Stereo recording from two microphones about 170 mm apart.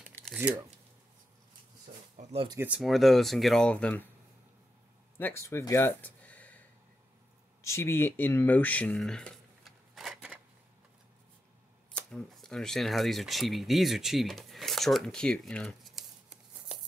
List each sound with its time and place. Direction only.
0.1 s a sound: centre (ahead or behind)
2.2 s a sound: 45° right (ahead or behind)
2.5 s speech: 10° right (ahead or behind); by 4.1 s 5° left (ahead or behind)
5.1 s speech: 15° left (ahead or behind)
7.6 s speech: 15° left (ahead or behind); by 10.4 s 5° right (ahead or behind)
11.9 s speech: 5° left (ahead or behind)